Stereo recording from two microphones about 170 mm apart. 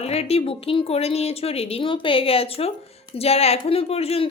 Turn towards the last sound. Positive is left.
turn(degrees=35)  # may be behind; listen again after turning